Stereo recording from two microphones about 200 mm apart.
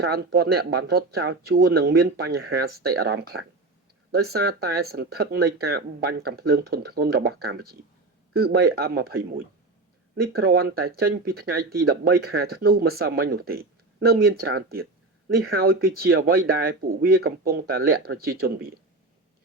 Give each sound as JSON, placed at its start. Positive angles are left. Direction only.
{"t": 0.0, "sound": "speech", "side_deg": -50}
{"t": 10.3, "sound": "speech", "side_deg": -50}